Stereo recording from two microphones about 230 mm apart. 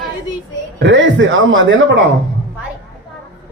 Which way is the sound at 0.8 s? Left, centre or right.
Right.